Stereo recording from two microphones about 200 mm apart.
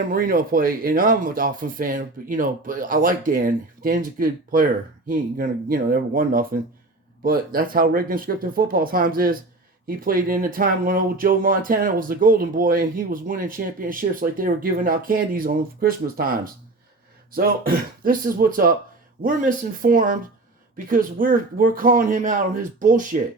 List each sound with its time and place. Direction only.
0.1 s speech: 45° right (ahead or behind)